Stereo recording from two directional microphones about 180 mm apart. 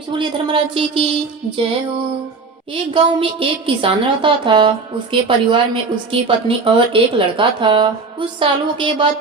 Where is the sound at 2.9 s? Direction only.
30° right (ahead or behind).